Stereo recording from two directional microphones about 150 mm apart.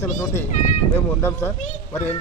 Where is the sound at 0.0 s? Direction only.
20° left (ahead or behind).